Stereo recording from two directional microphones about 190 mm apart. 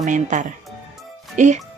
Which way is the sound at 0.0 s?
40° right (ahead or behind).